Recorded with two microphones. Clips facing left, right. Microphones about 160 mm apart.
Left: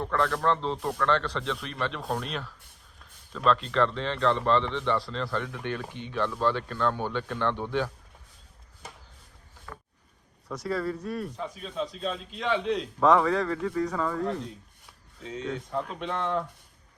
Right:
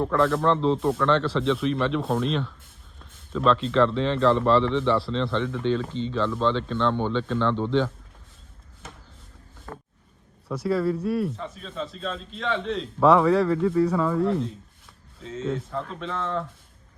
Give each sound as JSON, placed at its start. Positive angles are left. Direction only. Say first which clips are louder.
{"t": 0.0, "sound": "speech", "louder": "right 5 dB", "side_deg": 0}
{"t": 9.7, "sound": "a sound", "louder": "right 5 dB", "side_deg": -50}
{"t": 10.5, "sound": "speech", "louder": "right 6 dB", "side_deg": -5}